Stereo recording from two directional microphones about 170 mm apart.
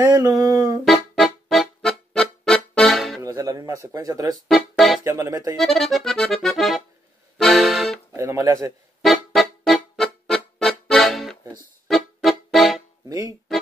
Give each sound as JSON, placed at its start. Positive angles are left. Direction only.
{"t": 0.0, "sound": "a sound", "side_deg": -20}
{"t": 0.8, "sound": "music", "side_deg": 0}
{"t": 3.2, "sound": "speech", "side_deg": -20}
{"t": 4.5, "sound": "music", "side_deg": 0}
{"t": 5.0, "sound": "a sound", "side_deg": -15}
{"t": 5.6, "sound": "accordion", "side_deg": 0}
{"t": 8.1, "sound": "speech", "side_deg": -15}
{"t": 9.0, "sound": "music", "side_deg": 0}